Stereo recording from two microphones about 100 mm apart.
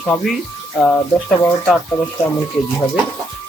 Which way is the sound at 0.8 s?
Centre (ahead or behind).